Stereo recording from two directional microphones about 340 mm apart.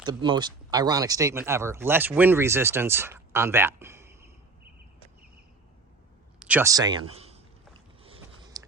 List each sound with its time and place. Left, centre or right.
0.0 s speech: centre
6.4 s speech: centre
7.1 s a sound: centre
8.0 s biting: centre